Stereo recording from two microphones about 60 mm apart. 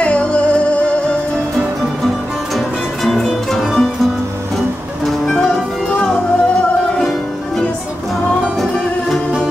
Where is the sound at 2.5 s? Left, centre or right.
Centre.